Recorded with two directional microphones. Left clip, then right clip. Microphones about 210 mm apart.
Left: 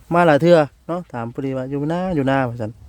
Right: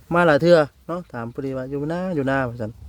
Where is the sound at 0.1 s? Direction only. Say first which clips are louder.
Left 2 dB; 15° left (ahead or behind).